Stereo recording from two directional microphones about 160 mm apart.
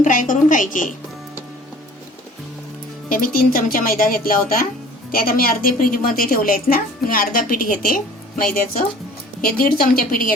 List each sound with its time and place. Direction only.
0.0 s a woman's voice: 55° left (ahead or behind)
3.1 s a woman's voice: 60° left (ahead or behind)